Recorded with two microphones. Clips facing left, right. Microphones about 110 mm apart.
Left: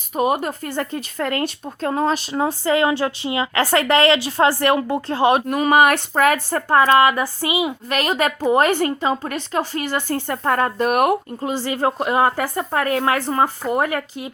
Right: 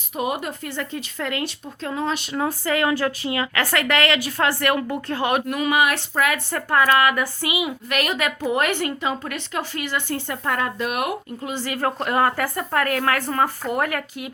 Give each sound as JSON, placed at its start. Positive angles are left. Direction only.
{"t": 0.2, "sound": "speech", "side_deg": 40}
{"t": 2.3, "sound": "a woman's voice", "side_deg": 25}